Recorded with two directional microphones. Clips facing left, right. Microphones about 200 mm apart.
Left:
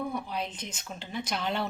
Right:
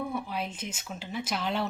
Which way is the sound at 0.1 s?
5° right (ahead or behind).